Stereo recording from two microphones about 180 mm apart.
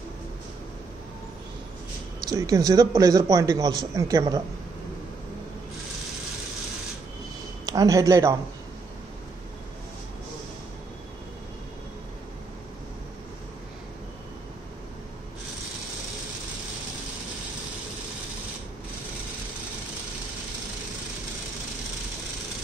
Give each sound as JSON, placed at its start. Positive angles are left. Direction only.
{"t": 2.2, "sound": "a man's voice", "side_deg": -20}
{"t": 7.6, "sound": "speech", "side_deg": -20}